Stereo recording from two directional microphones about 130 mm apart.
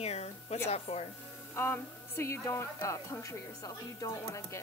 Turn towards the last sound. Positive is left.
turn(degrees=20)  # may be behind; listen again after turning